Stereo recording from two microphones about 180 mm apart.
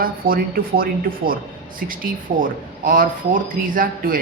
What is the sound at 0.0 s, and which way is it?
Speech, 55° right (ahead or behind).